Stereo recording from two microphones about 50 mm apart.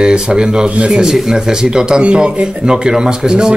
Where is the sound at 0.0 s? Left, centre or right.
Centre.